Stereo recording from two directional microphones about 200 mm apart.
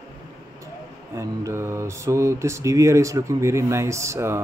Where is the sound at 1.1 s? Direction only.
15° right (ahead or behind).